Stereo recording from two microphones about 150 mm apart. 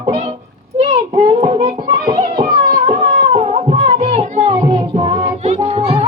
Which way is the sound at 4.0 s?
45° right (ahead or behind).